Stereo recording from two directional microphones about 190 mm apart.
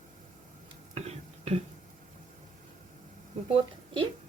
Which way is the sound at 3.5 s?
25° right (ahead or behind).